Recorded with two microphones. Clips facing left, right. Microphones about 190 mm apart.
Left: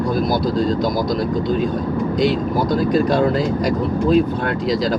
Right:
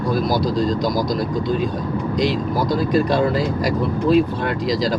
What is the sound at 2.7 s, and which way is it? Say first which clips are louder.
Speech: left 1 dB; centre (ahead or behind).